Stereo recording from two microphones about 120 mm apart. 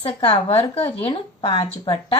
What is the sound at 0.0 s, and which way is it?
Speech, 55° left (ahead or behind).